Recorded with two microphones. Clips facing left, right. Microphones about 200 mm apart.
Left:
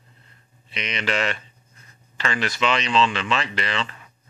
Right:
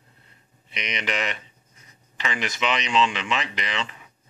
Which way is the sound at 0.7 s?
15° right (ahead or behind).